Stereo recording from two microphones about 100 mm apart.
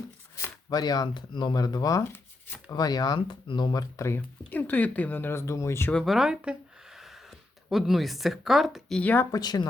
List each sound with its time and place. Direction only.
0.7 s speech: 40° left (ahead or behind)
3.2 s speech: 55° left (ahead or behind); by 4.2 s 30° left (ahead or behind)
4.4 s speech: 15° left (ahead or behind)
5.9 s speech: 10° left (ahead or behind)
6.1 s speech: 5° right (ahead or behind)
9.0 s speech: 15° left (ahead or behind)
9.3 s speech: 45° left (ahead or behind)